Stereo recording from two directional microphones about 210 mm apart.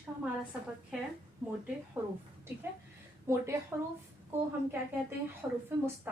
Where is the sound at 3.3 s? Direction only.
15° right (ahead or behind).